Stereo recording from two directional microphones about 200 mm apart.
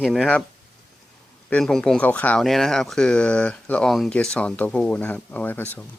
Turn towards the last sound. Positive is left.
turn(degrees=10)  # may be behind; listen again after turning